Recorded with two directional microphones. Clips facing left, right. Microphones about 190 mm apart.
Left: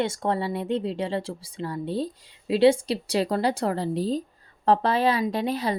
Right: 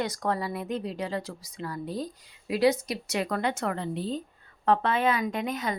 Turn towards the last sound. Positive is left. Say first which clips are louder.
# left 4 dB
turn(degrees=35)  # may be behind; listen again after turning